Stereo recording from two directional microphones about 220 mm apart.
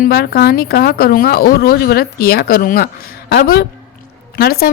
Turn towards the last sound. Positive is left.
turn(degrees=45)  # may be behind; listen again after turning